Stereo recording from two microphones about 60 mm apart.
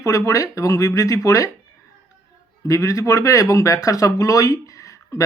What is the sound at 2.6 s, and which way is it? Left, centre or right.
Speech, left.